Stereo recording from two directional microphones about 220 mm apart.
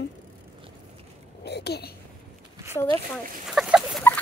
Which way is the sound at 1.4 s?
50° left (ahead or behind).